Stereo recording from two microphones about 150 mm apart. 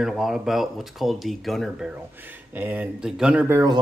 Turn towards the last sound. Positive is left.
turn(degrees=-25)  # may be behind; listen again after turning